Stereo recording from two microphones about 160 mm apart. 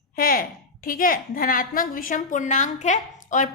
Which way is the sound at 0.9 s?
60° left (ahead or behind).